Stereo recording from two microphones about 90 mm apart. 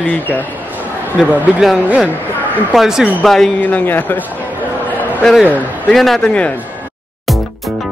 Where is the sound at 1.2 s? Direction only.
10° right (ahead or behind).